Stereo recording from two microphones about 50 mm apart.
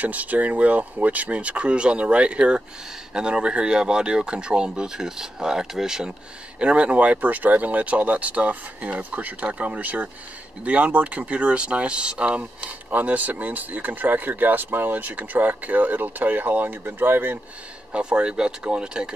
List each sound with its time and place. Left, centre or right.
0.0 s speech: right; by 6.1 s centre
6.6 s speech: right
12.4 s speech: right
17.9 s speech: centre